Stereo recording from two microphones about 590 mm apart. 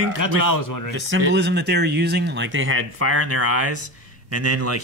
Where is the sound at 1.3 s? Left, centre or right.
Centre.